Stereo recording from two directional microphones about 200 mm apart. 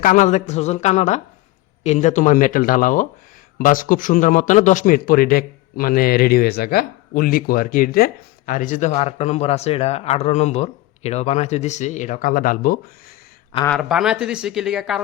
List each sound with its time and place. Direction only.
0.0 s a man's voice: 40° left (ahead or behind)
13.7 s speech: centre (ahead or behind)